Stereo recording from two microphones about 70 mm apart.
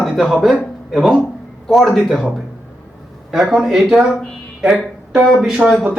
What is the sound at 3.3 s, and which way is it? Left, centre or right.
Speech, centre.